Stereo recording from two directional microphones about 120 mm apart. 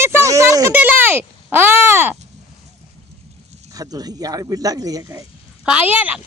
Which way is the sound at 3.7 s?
30° right (ahead or behind).